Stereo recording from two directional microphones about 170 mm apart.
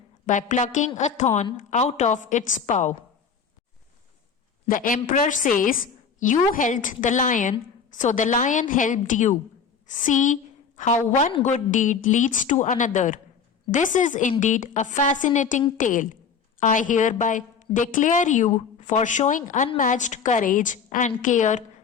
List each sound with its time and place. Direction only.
0.3 s a woman's voice: 45° left (ahead or behind)
4.7 s a woman's voice: 50° left (ahead or behind)